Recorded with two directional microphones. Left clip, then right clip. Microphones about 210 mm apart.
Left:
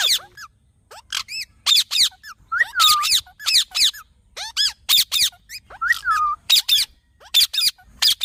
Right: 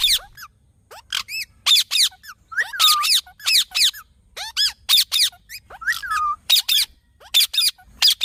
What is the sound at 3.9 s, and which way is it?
Squeak, centre (ahead or behind).